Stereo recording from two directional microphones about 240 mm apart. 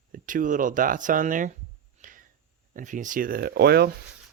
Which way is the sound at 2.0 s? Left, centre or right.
Right.